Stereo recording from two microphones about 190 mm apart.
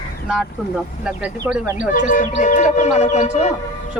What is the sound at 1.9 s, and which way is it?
Speech, 45° left (ahead or behind).